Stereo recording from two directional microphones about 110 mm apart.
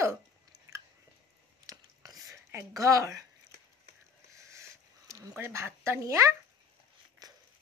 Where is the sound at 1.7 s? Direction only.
30° right (ahead or behind).